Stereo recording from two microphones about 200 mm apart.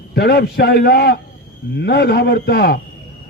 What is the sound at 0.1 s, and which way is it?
A man's voice, 55° left (ahead or behind).